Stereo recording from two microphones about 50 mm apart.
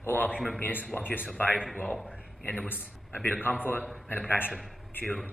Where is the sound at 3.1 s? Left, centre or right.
Left.